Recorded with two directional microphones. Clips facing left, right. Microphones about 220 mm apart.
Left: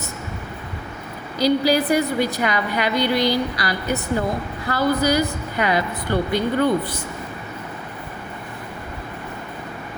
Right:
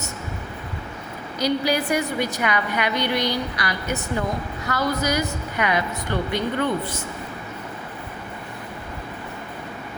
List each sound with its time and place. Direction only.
1.4 s speech: 35° left (ahead or behind)